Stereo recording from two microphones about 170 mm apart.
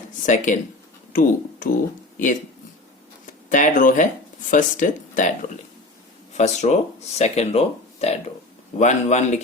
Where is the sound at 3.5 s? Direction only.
50° left (ahead or behind).